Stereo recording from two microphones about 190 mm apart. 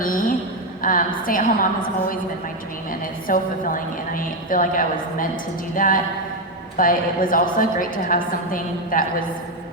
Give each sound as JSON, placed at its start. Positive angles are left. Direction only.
{"t": 0.0, "sound": "a sound", "side_deg": 45}
{"t": 0.8, "sound": "a woman's voice", "side_deg": 45}
{"t": 3.2, "sound": "a woman's voice", "side_deg": 45}